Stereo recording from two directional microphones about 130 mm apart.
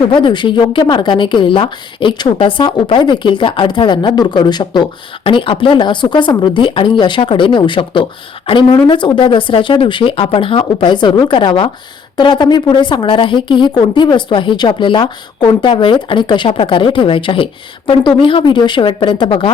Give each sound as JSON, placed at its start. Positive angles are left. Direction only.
{"t": 0.1, "sound": "speech", "side_deg": 35}